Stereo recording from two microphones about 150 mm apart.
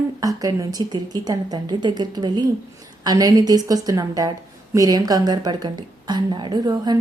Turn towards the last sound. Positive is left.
turn(degrees=-30)  # may be behind; listen again after turning